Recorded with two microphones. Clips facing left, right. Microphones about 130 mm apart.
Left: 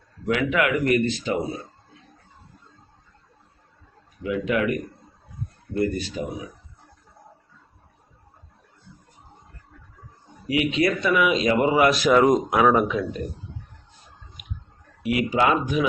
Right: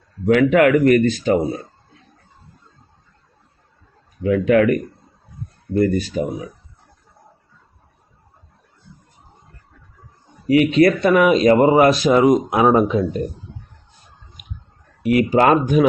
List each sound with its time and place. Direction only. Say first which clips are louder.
0.3 s speech: right 9 dB; 50° right (ahead or behind)
4.2 s speech: right 9 dB; 50° right (ahead or behind)
10.4 s speech: right 9 dB; 45° right (ahead or behind)
12.0 s speech: right 3 dB; 20° right (ahead or behind)
15.0 s speech: right 7 dB; 45° right (ahead or behind)